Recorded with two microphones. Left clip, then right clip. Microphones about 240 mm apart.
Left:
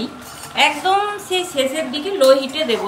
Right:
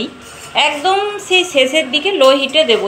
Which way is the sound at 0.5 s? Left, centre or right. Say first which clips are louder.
Right 2 dB; centre.